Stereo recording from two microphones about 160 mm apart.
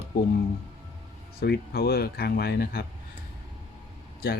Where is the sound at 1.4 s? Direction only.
75° left (ahead or behind).